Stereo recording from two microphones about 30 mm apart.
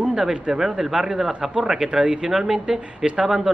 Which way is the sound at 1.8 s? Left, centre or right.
Right.